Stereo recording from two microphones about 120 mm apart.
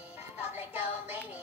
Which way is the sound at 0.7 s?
15° right (ahead or behind).